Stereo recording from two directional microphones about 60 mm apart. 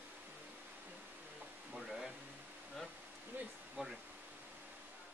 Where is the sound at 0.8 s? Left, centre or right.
Right.